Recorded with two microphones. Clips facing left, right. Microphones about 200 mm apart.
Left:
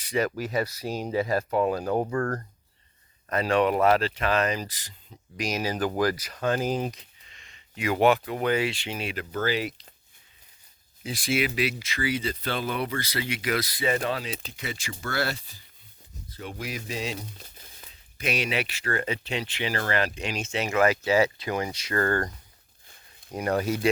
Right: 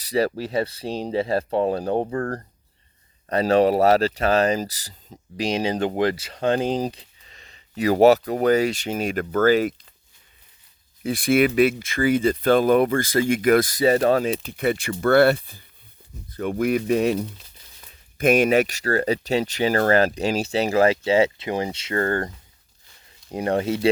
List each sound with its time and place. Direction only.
0.0 s speech: 35° right (ahead or behind)
11.0 s speech: 55° right (ahead or behind); by 22.3 s 25° right (ahead or behind)
23.3 s speech: 30° right (ahead or behind)